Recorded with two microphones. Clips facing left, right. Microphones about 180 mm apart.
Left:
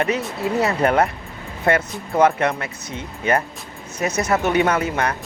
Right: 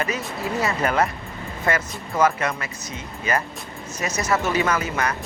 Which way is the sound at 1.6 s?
60° left (ahead or behind).